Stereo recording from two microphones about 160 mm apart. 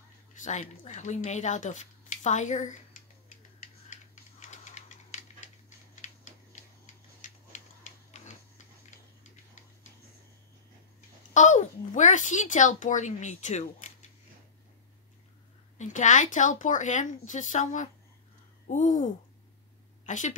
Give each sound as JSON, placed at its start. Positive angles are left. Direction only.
{"t": 0.3, "sound": "a child's voice", "side_deg": 50}
{"t": 3.9, "sound": "typewriter", "side_deg": 50}
{"t": 5.9, "sound": "a sound", "side_deg": 50}
{"t": 11.3, "sound": "a child's voice", "side_deg": 50}
{"t": 15.8, "sound": "a child's voice", "side_deg": 50}
{"t": 20.1, "sound": "a woman's voice", "side_deg": 50}